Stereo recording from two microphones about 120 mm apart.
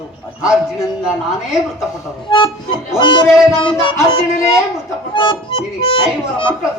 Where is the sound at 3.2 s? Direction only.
5° right (ahead or behind).